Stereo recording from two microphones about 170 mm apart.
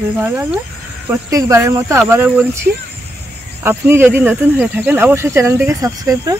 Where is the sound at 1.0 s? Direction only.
20° right (ahead or behind).